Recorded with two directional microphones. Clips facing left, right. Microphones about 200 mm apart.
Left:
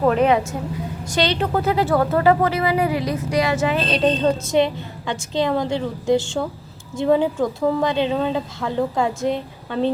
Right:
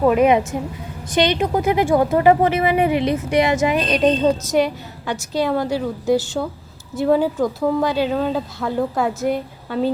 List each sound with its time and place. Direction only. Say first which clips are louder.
0.0 s a woman's voice: right 2 dB; 10° right (ahead or behind)
5.4 s speech: right 1 dB; 5° right (ahead or behind)